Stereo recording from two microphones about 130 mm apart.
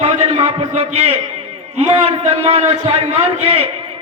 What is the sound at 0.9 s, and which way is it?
A man's voice, 50° right (ahead or behind).